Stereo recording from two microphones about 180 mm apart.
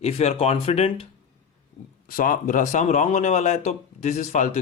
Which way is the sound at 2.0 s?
50° left (ahead or behind).